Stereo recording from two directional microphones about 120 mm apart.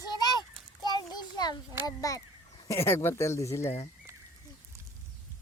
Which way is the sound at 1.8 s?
30° left (ahead or behind).